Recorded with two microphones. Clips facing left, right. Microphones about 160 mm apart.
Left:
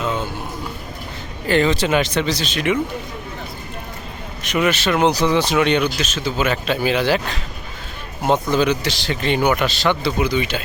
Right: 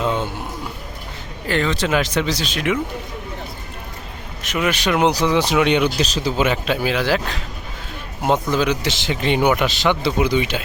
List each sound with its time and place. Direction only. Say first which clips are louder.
0.0 s a sound: right 2 dB; 25° right (ahead or behind)
1.5 s speech: left 3 dB; centre (ahead or behind)
4.4 s speech: left 2 dB; 5° right (ahead or behind)
6.0 s speech: right 2 dB; 35° right (ahead or behind)
6.4 s speech: even; 15° right (ahead or behind)
6.8 s speech: left 2 dB; centre (ahead or behind)
8.2 s speech: left 1 dB; 5° right (ahead or behind)